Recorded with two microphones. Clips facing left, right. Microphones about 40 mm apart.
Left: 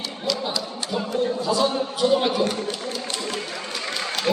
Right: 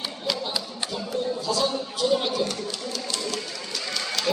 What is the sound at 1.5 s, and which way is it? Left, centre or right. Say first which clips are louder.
Speech: left 4 dB; centre.